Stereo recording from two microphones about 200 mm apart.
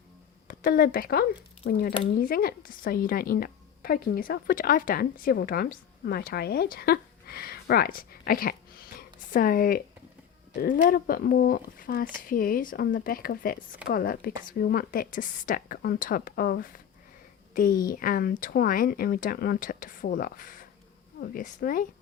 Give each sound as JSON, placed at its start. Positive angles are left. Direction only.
{"t": 0.4, "sound": "speech", "side_deg": 45}
{"t": 1.6, "sound": "speech", "side_deg": 60}
{"t": 2.1, "sound": "a woman's voice", "side_deg": 45}